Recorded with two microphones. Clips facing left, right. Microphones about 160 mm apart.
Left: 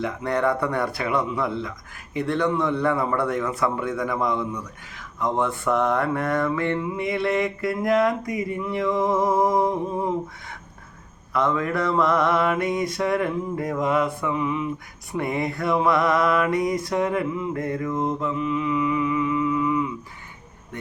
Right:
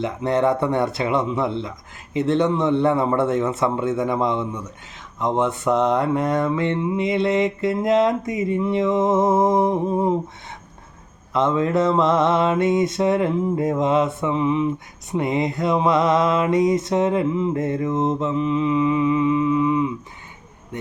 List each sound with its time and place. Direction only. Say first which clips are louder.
0.0 s mantra: right 3 dB; 25° right (ahead or behind)